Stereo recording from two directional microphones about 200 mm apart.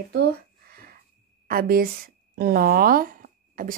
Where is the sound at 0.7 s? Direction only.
50° right (ahead or behind).